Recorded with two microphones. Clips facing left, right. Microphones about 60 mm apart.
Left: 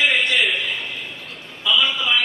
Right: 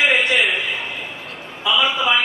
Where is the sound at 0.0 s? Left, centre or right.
Centre.